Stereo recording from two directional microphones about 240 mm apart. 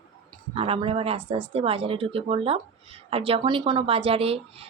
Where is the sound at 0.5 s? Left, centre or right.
Right.